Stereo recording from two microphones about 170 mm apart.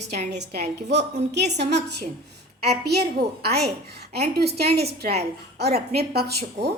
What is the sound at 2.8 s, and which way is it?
A woman's voice, 70° right (ahead or behind).